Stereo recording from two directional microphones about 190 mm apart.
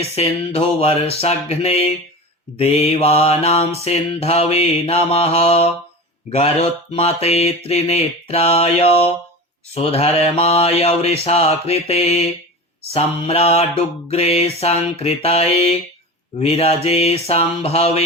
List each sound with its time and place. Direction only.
0.0 s mantra: 30° left (ahead or behind)